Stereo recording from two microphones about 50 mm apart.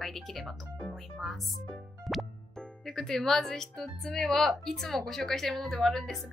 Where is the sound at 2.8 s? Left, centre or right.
Centre.